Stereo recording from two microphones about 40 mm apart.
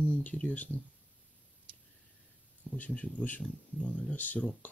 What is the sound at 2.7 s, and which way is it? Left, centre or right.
Speech, left.